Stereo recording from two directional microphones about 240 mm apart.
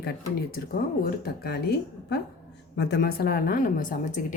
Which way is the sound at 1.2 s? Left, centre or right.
Left.